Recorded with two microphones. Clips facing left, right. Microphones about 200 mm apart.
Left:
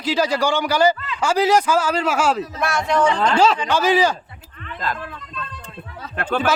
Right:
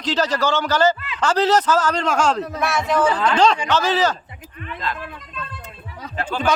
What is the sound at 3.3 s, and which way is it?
Speech, 5° left (ahead or behind).